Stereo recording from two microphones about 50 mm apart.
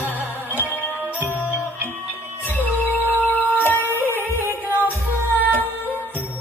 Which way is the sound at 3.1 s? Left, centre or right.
Left.